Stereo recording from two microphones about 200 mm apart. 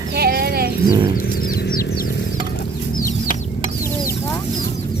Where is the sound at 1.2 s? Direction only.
50° left (ahead or behind).